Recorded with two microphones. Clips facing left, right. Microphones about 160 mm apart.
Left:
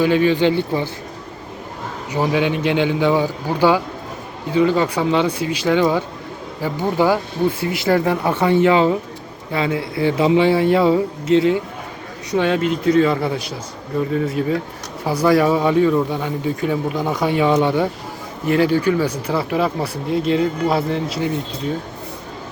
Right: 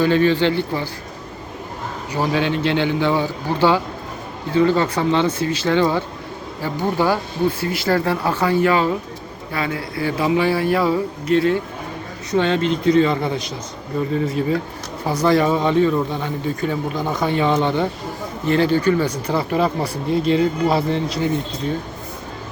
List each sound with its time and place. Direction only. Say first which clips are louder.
0.0 s speech: left 1 dB; 10° left (ahead or behind)
2.1 s speech: left 2 dB; 15° left (ahead or behind)
12.3 s speech: even; 5° left (ahead or behind)